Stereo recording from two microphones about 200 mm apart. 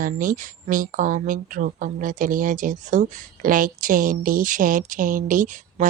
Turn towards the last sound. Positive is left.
turn(degrees=-40)  # may be behind; listen again after turning